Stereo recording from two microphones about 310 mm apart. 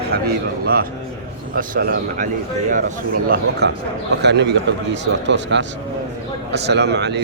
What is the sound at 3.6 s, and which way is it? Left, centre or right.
A man's voice, right.